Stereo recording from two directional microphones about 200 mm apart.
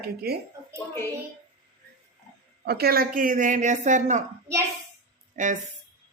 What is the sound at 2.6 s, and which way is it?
Speech, 50° right (ahead or behind).